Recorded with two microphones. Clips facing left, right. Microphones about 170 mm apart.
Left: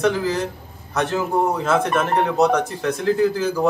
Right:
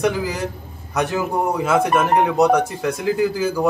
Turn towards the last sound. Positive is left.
turn(degrees=-10)  # may be behind; listen again after turning